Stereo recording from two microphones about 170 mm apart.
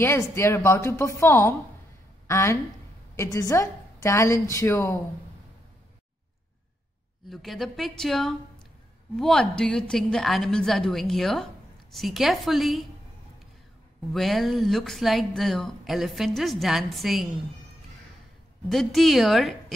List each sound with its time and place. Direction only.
0.0 s a woman's voice: 15° left (ahead or behind)
7.2 s speech: centre (ahead or behind)
14.1 s speech: centre (ahead or behind)
18.7 s speech: centre (ahead or behind)